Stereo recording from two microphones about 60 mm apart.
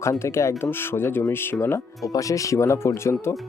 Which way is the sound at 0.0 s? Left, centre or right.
Left.